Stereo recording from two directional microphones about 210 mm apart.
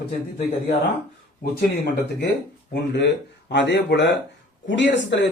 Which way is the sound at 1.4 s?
50° left (ahead or behind).